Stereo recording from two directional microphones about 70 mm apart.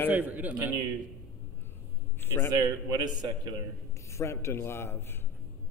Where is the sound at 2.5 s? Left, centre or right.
Right.